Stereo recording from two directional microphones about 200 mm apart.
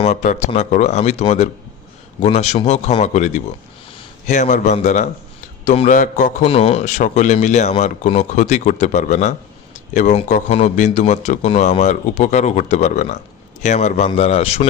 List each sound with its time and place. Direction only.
0.0 s a man's voice: 35° left (ahead or behind)